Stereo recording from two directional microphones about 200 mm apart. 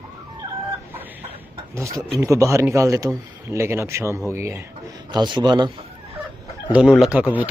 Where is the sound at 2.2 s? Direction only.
15° right (ahead or behind).